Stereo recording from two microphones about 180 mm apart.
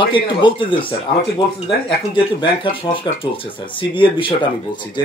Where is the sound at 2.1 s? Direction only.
30° left (ahead or behind).